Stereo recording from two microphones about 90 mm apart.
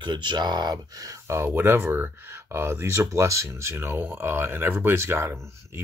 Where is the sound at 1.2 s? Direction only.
30° right (ahead or behind).